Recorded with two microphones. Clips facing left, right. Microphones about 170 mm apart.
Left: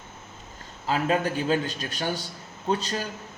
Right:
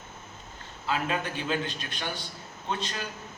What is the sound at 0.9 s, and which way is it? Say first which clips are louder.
A man's voice: left 5 dB; 35° left (ahead or behind).